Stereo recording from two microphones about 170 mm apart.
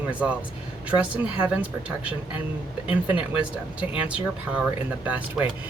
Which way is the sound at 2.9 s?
10° right (ahead or behind).